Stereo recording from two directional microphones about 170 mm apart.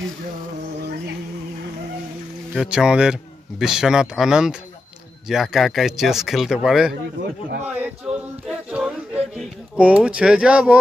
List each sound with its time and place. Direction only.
2.5 s a man's voice: 5° right (ahead or behind)
7.6 s yodeling: 10° right (ahead or behind)